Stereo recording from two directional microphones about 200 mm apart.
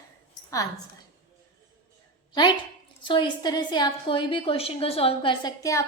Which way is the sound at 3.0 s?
25° left (ahead or behind).